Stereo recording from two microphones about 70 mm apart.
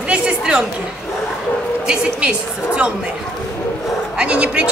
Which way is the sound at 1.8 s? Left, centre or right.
Centre.